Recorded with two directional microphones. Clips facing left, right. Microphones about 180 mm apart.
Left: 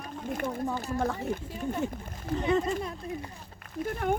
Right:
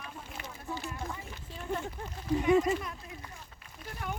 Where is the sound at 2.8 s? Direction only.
30° left (ahead or behind).